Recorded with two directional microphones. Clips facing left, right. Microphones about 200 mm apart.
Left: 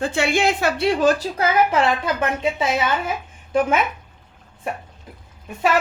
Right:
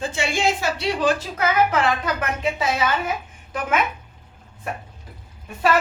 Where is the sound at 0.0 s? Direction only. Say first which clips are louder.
Left 3 dB; 60° left (ahead or behind); by 1.5 s 40° left (ahead or behind).